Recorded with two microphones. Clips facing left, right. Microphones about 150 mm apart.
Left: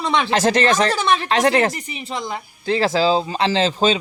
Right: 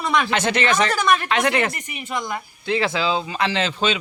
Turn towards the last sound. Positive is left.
turn(degrees=35)  # may be behind; listen again after turning